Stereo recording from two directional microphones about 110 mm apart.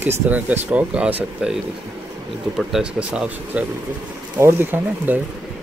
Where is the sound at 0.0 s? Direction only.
15° right (ahead or behind).